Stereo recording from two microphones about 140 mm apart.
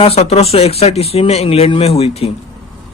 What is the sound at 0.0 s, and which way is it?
A man's voice, 45° left (ahead or behind).